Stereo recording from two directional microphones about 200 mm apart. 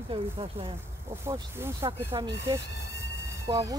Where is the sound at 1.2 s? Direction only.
15° right (ahead or behind).